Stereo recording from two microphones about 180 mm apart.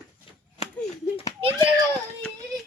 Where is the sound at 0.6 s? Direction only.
35° left (ahead or behind).